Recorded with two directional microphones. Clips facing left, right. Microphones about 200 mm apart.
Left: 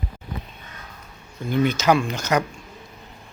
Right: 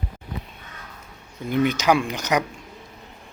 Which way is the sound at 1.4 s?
15° right (ahead or behind).